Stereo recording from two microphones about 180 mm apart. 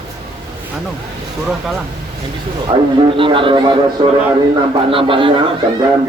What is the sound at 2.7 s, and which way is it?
A man's voice, 30° right (ahead or behind).